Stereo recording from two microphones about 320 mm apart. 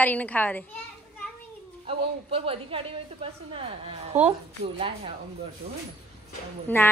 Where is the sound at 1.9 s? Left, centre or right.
Centre.